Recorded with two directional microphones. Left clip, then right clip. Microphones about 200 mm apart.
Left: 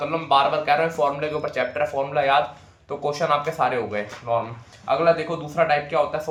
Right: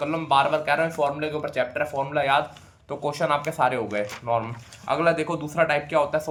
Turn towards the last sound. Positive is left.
turn(degrees=-25)  # may be behind; listen again after turning